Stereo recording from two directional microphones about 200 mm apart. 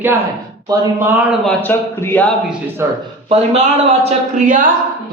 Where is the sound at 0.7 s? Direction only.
10° right (ahead or behind).